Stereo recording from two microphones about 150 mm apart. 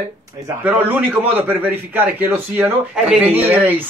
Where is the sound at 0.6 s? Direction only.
15° right (ahead or behind).